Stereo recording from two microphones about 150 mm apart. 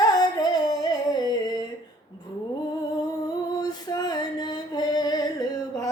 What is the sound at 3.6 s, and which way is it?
Music, 25° left (ahead or behind).